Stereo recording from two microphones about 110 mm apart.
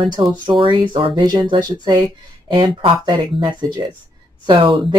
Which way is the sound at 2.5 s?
55° right (ahead or behind).